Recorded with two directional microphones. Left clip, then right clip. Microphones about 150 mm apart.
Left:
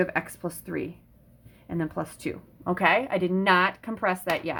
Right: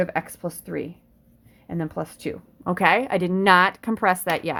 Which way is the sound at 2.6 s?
65° right (ahead or behind).